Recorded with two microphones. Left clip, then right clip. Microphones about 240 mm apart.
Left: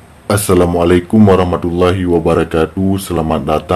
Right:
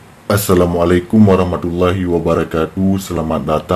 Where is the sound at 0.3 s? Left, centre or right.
Centre.